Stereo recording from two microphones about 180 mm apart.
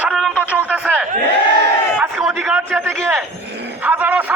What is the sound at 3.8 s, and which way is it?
Speech, 10° right (ahead or behind).